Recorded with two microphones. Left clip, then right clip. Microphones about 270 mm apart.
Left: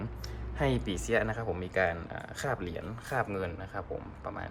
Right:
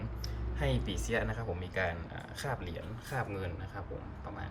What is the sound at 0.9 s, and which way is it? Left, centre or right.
Speech, centre.